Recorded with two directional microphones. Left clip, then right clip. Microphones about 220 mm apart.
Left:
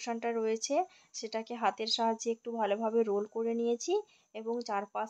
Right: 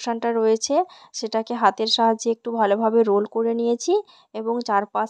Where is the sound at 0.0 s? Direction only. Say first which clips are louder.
Right 12 dB; 30° right (ahead or behind).